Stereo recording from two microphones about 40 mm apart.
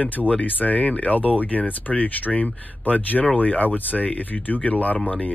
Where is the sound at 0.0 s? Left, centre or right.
Left.